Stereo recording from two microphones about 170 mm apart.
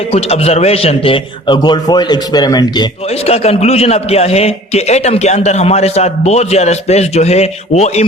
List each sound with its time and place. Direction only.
0.1 s a man's voice: 35° left (ahead or behind)
3.2 s a man's voice: 35° left (ahead or behind)